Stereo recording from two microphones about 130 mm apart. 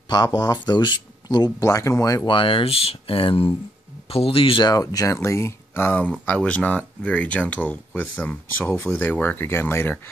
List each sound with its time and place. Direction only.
0.1 s speech: 30° left (ahead or behind)
2.2 s speech: 40° left (ahead or behind); by 9.9 s 15° left (ahead or behind)